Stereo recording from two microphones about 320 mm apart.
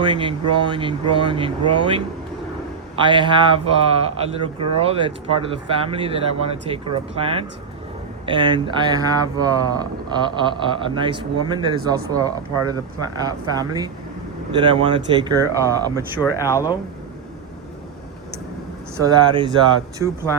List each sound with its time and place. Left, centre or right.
0.0 s speech: centre
3.0 s speech: centre
16.2 s speech: centre
18.9 s speech: centre